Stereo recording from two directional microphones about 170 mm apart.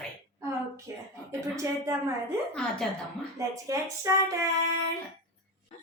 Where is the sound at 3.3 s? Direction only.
20° right (ahead or behind).